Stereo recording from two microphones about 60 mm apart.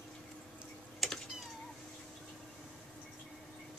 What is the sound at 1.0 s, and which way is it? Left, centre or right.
Cat, centre.